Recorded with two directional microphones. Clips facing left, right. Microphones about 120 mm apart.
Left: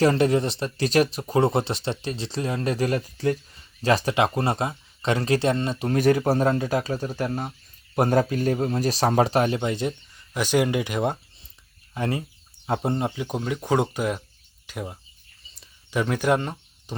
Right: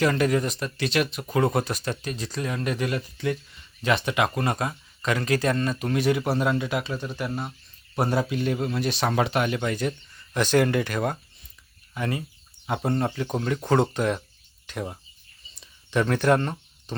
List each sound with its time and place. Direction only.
0.0 s speech: 30° left (ahead or behind)
6.0 s a man's voice: 40° left (ahead or behind)
9.6 s speech: 20° left (ahead or behind)
10.3 s speech: 10° left (ahead or behind); by 12.9 s 30° left (ahead or behind)
13.1 s speech: 10° left (ahead or behind)
15.5 s a sound: 5° left (ahead or behind)